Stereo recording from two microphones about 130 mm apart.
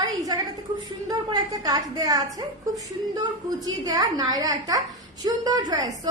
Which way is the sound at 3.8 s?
30° right (ahead or behind).